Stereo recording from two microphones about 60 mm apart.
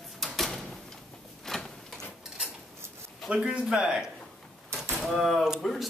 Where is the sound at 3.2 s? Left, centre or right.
Centre.